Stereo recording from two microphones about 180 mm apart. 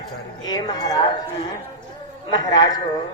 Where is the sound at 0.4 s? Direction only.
20° left (ahead or behind).